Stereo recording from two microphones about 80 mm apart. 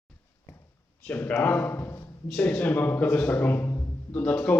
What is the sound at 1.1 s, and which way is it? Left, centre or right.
Speech, left.